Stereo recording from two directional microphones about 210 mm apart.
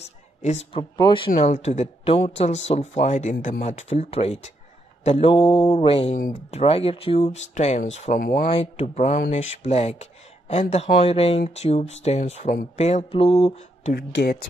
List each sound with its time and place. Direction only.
0.4 s speech: 30° left (ahead or behind)
1.3 s speech: 35° left (ahead or behind)
8.2 s speech: 45° left (ahead or behind)
8.5 s speech: 30° left (ahead or behind)
13.9 s speech: 50° left (ahead or behind)